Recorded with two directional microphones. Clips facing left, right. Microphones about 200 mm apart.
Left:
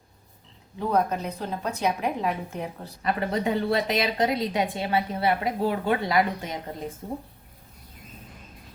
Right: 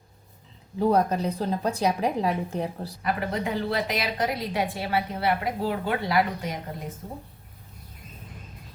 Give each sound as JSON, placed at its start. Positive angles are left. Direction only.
{"t": 0.8, "sound": "a woman's voice", "side_deg": -35}
{"t": 3.0, "sound": "a woman's voice", "side_deg": 25}